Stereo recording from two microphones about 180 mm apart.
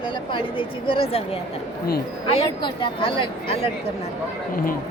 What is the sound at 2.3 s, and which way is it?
A woman's voice, 30° left (ahead or behind).